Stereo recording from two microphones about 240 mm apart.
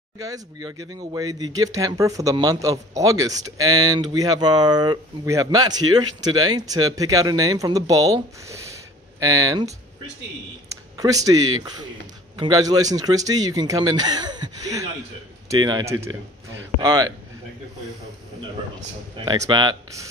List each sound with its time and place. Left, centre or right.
0.2 s speech: centre
10.7 s a sound: centre
12.4 s speech: centre
19.2 s speech: centre